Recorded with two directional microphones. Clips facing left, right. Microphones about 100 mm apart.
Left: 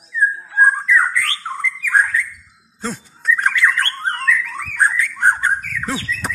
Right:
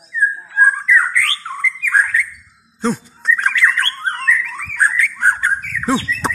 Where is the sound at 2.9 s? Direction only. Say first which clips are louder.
Left 2 dB; 10° left (ahead or behind).